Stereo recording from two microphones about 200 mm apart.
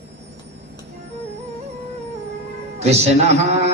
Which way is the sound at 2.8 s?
35° right (ahead or behind).